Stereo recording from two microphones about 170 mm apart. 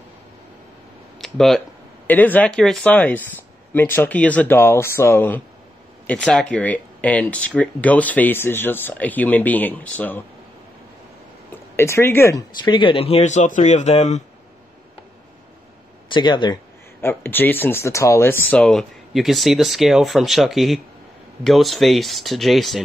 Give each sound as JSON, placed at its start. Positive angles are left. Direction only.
{"t": 1.1, "sound": "a sound", "side_deg": 0}
{"t": 2.0, "sound": "speech", "side_deg": 10}
{"t": 11.5, "sound": "speech", "side_deg": 15}
{"t": 16.1, "sound": "speech", "side_deg": 25}
{"t": 17.0, "sound": "speech", "side_deg": 15}